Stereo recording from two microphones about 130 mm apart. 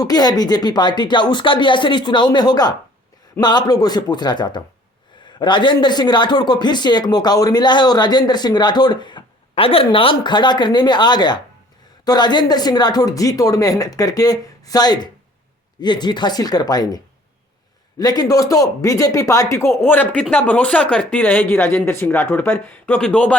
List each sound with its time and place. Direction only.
0.0 s a man's voice: 30° left (ahead or behind)
18.0 s speech: 30° left (ahead or behind); by 23.4 s 10° left (ahead or behind)